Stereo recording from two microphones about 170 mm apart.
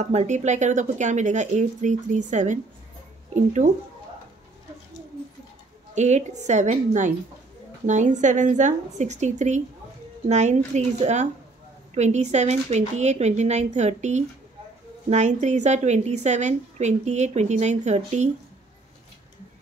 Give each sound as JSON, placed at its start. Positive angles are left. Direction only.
{"t": 0.0, "sound": "speech", "side_deg": -45}
{"t": 5.9, "sound": "a woman's voice", "side_deg": -45}